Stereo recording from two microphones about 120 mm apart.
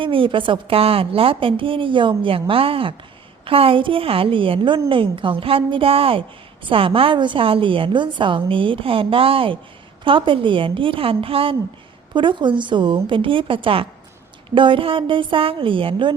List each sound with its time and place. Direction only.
0.0 s a woman's voice: 45° right (ahead or behind)